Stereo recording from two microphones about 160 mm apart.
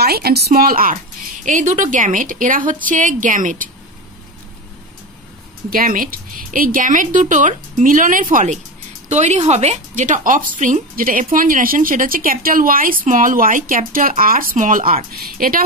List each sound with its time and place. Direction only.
0.0 s speech: 80° right; by 0.9 s 65° right (ahead or behind)
1.4 s a woman's voice: 50° right (ahead or behind)
5.7 s a woman's voice: 60° right (ahead or behind)